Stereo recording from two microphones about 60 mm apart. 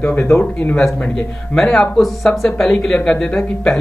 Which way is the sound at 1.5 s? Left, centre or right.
Centre.